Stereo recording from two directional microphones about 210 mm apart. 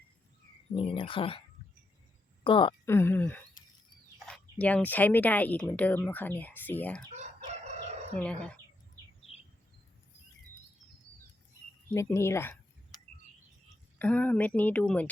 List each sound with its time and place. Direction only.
0.8 s speech: 25° left (ahead or behind)
2.4 s speech: 25° left (ahead or behind)
2.8 s speech: 10° left (ahead or behind)
7.1 s chicken: 35° right (ahead or behind)
8.2 s speech: 5° left (ahead or behind)
11.9 s speech: 10° left (ahead or behind)
14.0 s speech: 5° left (ahead or behind)